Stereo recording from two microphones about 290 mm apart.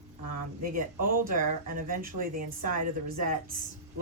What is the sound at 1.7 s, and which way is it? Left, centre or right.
Speech, right.